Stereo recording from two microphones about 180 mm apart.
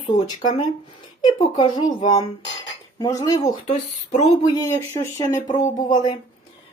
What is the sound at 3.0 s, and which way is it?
Speech, 20° left (ahead or behind).